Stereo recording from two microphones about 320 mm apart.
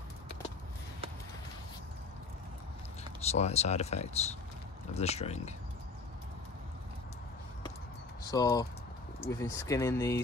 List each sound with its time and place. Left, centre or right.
3.0 s speech: centre
8.2 s speech: centre